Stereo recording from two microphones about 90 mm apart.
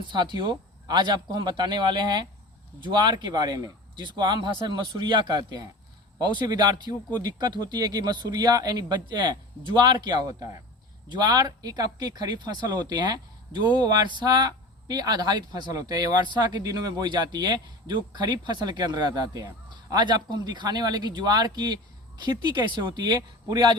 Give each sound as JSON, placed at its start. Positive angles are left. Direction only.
{"t": 0.0, "sound": "speech", "side_deg": -60}
{"t": 11.1, "sound": "speech", "side_deg": -55}